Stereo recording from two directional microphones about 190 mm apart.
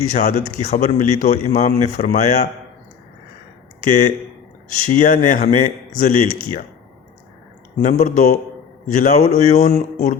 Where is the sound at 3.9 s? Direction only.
40° left (ahead or behind).